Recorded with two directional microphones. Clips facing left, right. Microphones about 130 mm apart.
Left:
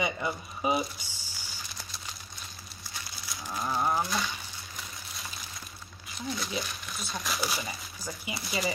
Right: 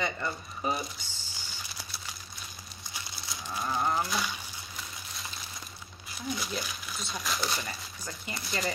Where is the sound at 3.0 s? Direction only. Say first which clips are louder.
Left 1 dB; 25° right (ahead or behind).